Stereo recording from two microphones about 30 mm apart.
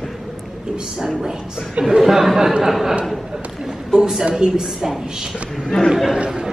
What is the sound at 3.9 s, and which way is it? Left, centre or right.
Speech, right.